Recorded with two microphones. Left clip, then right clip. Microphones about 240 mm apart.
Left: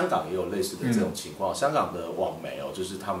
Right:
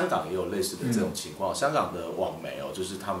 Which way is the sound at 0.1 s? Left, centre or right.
Centre.